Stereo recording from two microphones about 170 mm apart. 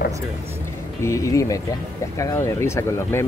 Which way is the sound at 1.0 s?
15° left (ahead or behind).